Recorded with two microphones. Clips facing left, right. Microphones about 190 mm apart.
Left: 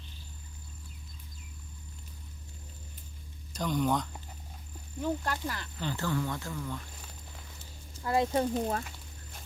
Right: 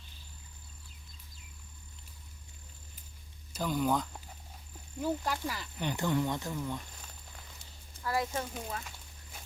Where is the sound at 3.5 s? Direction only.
5° right (ahead or behind).